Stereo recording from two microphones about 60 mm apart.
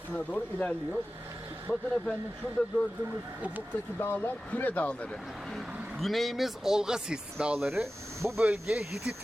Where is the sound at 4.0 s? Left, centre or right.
Left.